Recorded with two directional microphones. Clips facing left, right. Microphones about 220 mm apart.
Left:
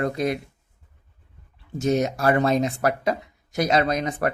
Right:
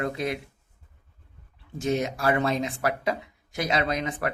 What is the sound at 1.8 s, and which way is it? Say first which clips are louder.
Speech: left 4 dB; 40° left (ahead or behind).